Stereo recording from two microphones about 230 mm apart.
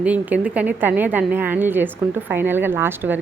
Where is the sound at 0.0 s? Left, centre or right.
Centre.